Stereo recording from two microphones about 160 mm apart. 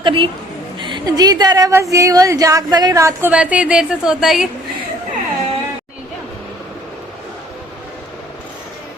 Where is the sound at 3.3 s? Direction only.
10° right (ahead or behind).